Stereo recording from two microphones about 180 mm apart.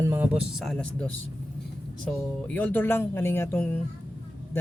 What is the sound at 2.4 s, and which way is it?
Speech, 10° left (ahead or behind).